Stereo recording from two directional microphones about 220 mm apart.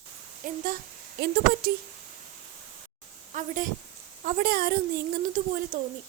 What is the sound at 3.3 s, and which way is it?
A woman's voice, 35° right (ahead or behind).